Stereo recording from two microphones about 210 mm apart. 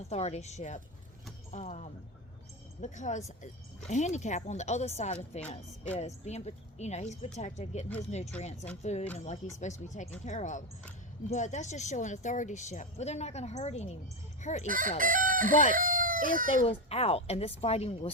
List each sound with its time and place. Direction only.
0.1 s a woman's voice: 30° left (ahead or behind)
14.7 s chicken: 40° right (ahead or behind)
15.7 s speech: 40° right (ahead or behind)
16.6 s speech: 30° left (ahead or behind)